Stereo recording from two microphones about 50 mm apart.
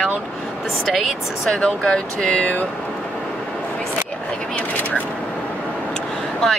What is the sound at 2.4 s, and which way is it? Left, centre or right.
Speech, left.